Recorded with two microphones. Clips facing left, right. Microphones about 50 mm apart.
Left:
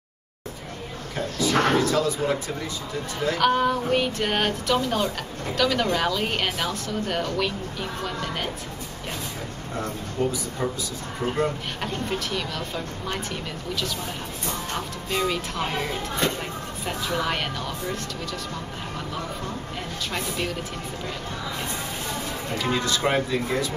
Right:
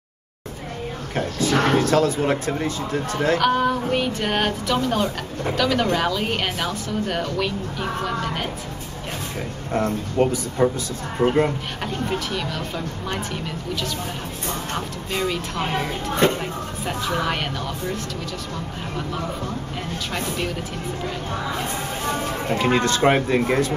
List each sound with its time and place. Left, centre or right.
1.1 s speech: right
3.3 s speech: centre
9.8 s speech: right
11.1 s speech: right
11.8 s speech: centre
15.0 s speech: centre
16.2 s speech: right
17.2 s speech: centre
20.1 s speech: centre
22.5 s speech: right